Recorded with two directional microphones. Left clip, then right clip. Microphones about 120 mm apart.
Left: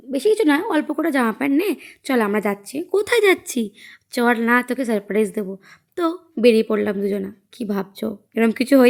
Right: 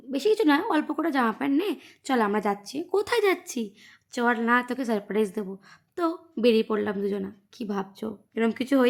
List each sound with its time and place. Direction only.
0.1 s a woman's voice: 20° left (ahead or behind); by 8.9 s 40° left (ahead or behind)